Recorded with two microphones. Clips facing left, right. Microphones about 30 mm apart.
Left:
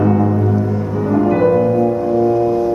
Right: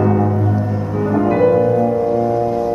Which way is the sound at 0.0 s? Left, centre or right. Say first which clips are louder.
Left 1 dB; centre.